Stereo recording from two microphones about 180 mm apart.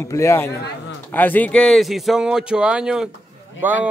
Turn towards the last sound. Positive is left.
turn(degrees=-10)  # may be behind; listen again after turning